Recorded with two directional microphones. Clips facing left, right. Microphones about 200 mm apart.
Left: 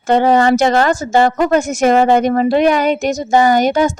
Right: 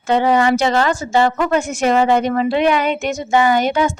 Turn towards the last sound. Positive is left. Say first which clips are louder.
# left 3 dB
turn(degrees=40)  # may be behind; listen again after turning